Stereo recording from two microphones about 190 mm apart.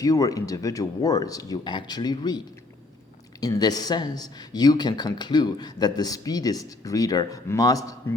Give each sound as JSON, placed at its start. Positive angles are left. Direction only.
{"t": 0.0, "sound": "speech", "side_deg": 20}
{"t": 3.4, "sound": "speech", "side_deg": 20}